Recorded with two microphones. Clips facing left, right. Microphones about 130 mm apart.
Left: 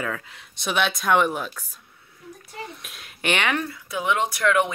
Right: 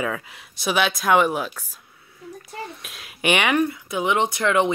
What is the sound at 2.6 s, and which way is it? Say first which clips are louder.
Speech: right 2 dB; centre (ahead or behind).